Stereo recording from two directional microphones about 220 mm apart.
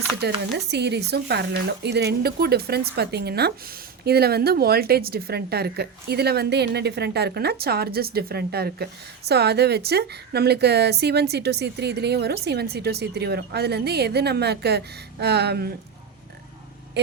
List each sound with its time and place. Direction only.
0.2 s speech: 50° right (ahead or behind)